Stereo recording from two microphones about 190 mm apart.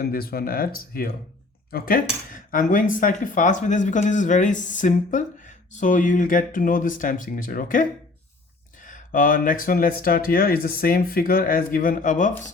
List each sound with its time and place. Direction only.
0.0 s speech: 55° left (ahead or behind)